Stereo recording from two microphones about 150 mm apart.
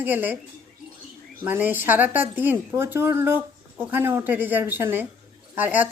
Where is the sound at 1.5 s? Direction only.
10° right (ahead or behind).